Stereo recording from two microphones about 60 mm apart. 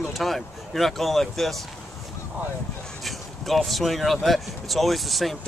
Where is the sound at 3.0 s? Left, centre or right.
Centre.